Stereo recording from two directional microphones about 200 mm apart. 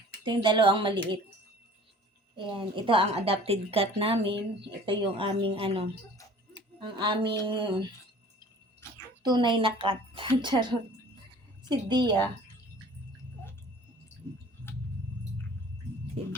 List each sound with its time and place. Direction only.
0.3 s a woman's voice: 25° right (ahead or behind)
2.3 s a woman's voice: 25° right (ahead or behind)
8.8 s a sound: 15° left (ahead or behind)
9.2 s a woman's voice: 20° right (ahead or behind)